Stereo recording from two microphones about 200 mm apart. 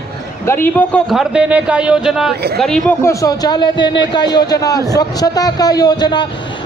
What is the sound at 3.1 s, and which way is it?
Speech, 15° left (ahead or behind).